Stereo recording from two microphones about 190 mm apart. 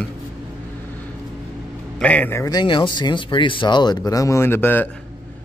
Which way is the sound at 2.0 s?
5° left (ahead or behind).